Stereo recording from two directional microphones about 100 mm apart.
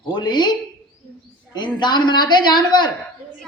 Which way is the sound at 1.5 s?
45° left (ahead or behind).